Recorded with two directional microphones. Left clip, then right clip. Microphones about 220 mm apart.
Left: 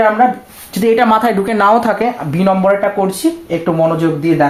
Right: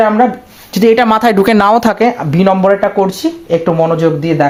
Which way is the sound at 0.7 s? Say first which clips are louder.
Right 2 dB; 45° right (ahead or behind).